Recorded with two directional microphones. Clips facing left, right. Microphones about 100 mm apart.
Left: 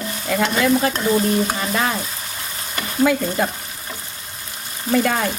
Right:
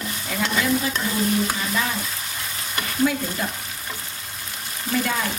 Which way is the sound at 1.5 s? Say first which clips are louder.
Left 3 dB; 45° left (ahead or behind).